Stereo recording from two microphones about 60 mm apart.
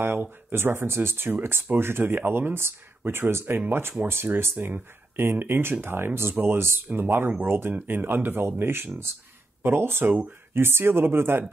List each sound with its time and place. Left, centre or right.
0.0 s speech: right